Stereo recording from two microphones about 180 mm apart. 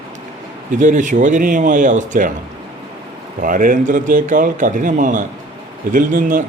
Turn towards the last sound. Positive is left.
turn(degrees=-50)  # may be behind; listen again after turning